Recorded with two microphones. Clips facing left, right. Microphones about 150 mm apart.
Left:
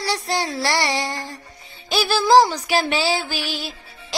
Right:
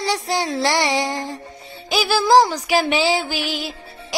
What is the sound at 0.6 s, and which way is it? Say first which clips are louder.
Child singing: right 5 dB; 15° right (ahead or behind).